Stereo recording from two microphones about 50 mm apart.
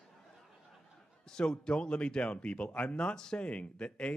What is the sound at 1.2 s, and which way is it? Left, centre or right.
Speech, centre.